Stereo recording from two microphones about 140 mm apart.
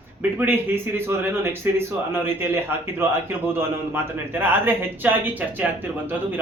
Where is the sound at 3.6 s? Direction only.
15° right (ahead or behind).